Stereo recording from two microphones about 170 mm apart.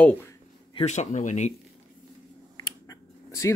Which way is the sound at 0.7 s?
40° left (ahead or behind).